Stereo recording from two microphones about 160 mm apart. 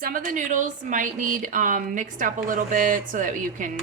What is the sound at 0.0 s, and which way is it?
Speech, 55° right (ahead or behind).